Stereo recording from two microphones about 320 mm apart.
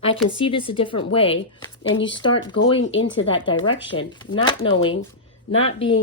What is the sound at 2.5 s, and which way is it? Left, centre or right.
Speech, left.